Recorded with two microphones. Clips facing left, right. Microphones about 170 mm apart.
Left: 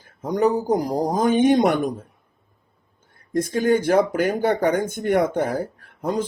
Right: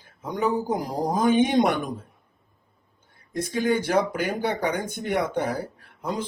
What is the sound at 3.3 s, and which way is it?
Speech, 45° left (ahead or behind).